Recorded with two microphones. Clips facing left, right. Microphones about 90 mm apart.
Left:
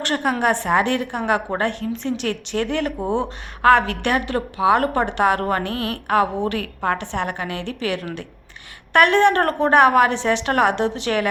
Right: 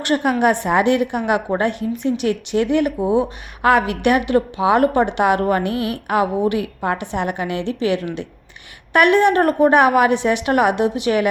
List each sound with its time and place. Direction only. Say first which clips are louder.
0.0 s a woman's voice: right 4 dB; 15° right (ahead or behind)